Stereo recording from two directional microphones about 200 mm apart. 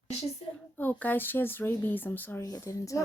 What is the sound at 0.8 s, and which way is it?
Speech, 10° left (ahead or behind).